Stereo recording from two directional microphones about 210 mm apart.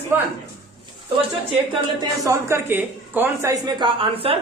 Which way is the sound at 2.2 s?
15° right (ahead or behind).